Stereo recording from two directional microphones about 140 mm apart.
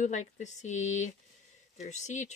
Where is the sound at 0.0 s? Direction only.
55° left (ahead or behind).